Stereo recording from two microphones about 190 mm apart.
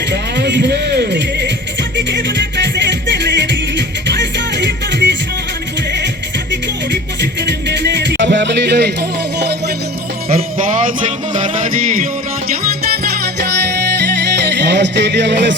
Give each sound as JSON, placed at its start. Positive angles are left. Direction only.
{"t": 0.1, "sound": "music", "side_deg": -65}
{"t": 6.5, "sound": "music", "side_deg": -65}
{"t": 10.2, "sound": "music", "side_deg": -45}
{"t": 14.4, "sound": "music", "side_deg": -65}